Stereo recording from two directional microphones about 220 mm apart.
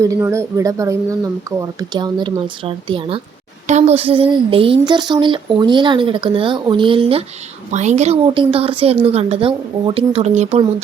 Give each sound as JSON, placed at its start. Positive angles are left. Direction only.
{"t": 0.0, "sound": "speech", "side_deg": -15}